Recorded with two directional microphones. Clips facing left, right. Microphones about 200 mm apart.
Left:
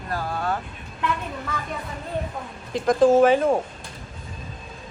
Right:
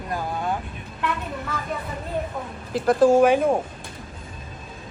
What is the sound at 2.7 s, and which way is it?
Speech, 5° right (ahead or behind).